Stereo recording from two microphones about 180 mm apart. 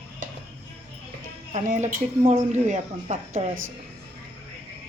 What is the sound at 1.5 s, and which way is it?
A woman's voice, 45° right (ahead or behind).